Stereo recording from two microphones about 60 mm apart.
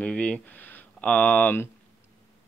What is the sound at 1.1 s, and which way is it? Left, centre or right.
Speech, left.